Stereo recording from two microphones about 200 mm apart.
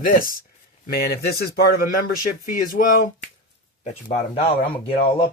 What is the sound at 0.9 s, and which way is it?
Speech, 50° left (ahead or behind).